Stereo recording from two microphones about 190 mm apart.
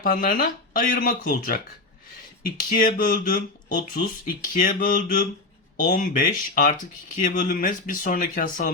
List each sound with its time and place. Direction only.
0.0 s speech: 50° left (ahead or behind)